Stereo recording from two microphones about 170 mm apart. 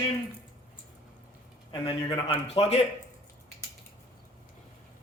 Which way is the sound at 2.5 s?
40° left (ahead or behind).